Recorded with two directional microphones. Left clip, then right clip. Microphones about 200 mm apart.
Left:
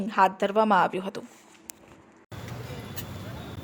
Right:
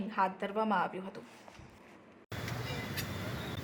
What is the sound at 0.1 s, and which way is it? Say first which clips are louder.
Speech: left 11 dB; 40° left (ahead or behind).